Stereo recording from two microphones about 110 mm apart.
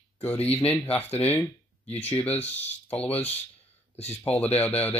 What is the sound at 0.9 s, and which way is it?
Speech, 15° left (ahead or behind).